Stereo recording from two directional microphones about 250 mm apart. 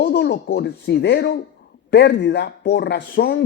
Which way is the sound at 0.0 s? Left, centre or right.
Left.